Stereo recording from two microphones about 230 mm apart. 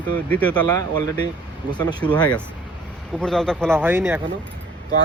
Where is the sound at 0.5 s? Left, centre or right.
Centre.